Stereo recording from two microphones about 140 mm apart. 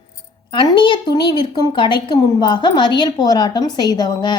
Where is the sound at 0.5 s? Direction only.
35° left (ahead or behind).